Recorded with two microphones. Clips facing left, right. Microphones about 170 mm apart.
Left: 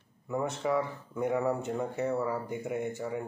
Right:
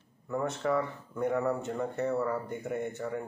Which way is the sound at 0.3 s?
10° left (ahead or behind).